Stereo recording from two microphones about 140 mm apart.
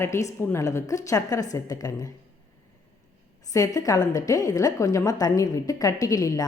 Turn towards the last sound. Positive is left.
turn(degrees=25)  # may be behind; listen again after turning